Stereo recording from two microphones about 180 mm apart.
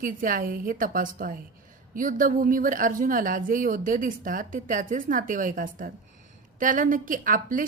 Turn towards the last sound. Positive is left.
turn(degrees=-50)  # may be behind; listen again after turning